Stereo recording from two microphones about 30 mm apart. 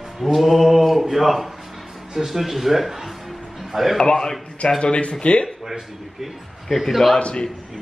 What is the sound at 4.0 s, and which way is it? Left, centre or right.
A man's voice, left.